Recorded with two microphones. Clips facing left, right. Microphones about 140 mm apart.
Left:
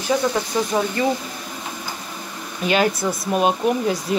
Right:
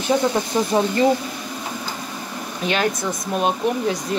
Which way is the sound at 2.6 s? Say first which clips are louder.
Left 3 dB; 5° left (ahead or behind).